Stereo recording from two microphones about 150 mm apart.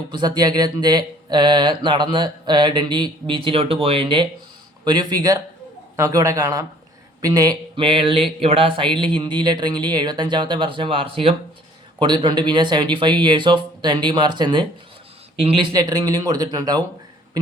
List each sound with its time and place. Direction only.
0.1 s speech: 30° right (ahead or behind)